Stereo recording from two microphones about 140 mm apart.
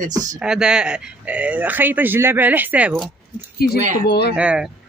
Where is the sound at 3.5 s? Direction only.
90° left.